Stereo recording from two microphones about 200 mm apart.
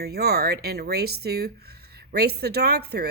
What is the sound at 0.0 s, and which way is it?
Speech, 55° right (ahead or behind).